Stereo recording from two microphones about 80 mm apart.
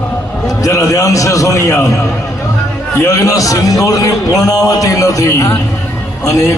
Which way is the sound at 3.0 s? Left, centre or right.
Left.